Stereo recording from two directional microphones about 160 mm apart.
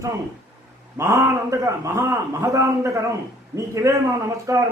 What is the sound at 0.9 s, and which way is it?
A man's voice, 20° right (ahead or behind).